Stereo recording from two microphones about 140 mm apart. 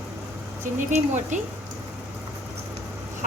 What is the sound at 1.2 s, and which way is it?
Speech, 60° right (ahead or behind).